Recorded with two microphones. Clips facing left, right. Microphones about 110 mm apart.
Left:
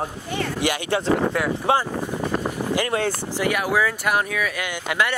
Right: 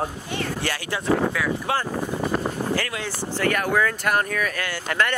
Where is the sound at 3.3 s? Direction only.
10° left (ahead or behind).